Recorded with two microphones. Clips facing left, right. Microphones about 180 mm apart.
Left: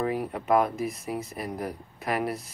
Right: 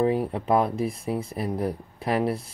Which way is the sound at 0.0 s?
30° right (ahead or behind).